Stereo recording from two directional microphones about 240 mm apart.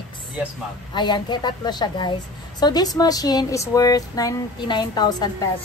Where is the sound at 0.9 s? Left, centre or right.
Centre.